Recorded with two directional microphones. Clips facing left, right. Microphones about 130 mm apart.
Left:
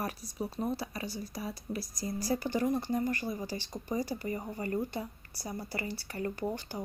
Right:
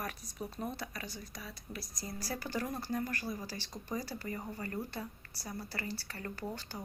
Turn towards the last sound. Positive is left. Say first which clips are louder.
# left 6 dB
turn(degrees=20)  # may be behind; listen again after turning